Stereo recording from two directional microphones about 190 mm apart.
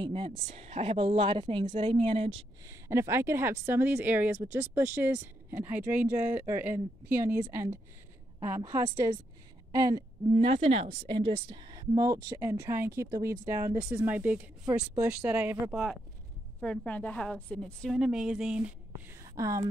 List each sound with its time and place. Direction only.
0.0 s a woman's voice: 30° right (ahead or behind)
2.6 s a woman's voice: 15° right (ahead or behind)
19.2 s speech: 15° right (ahead or behind)